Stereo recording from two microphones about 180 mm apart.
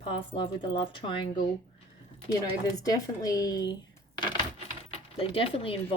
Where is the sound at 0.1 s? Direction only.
30° left (ahead or behind).